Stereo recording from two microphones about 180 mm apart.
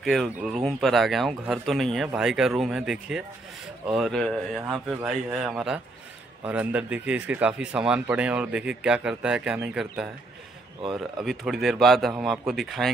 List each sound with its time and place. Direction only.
0.0 s speech: centre (ahead or behind)